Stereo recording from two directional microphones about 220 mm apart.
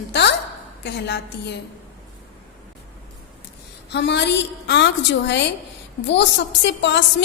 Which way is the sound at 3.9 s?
50° left (ahead or behind).